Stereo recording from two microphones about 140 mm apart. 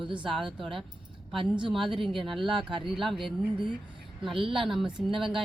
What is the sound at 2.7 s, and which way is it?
Speech, 40° right (ahead or behind).